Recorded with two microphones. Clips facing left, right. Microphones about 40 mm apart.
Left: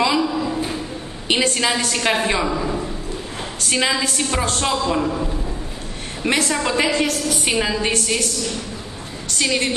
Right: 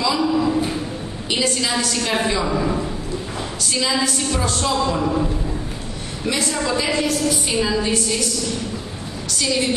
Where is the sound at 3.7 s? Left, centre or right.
Left.